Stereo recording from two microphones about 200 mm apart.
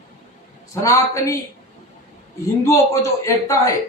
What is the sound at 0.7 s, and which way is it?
Speech, 15° left (ahead or behind).